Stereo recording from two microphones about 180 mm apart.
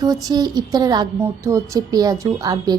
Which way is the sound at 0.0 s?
20° right (ahead or behind).